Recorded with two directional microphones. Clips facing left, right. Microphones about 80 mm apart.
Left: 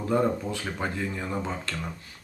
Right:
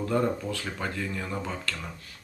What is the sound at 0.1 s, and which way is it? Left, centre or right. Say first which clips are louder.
Speech: left 3 dB; centre.